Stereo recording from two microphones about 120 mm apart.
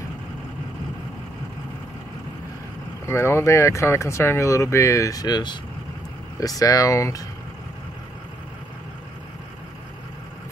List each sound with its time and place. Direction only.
3.1 s speech: 20° left (ahead or behind)